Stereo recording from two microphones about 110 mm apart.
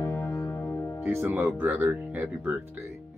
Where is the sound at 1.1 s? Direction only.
20° right (ahead or behind).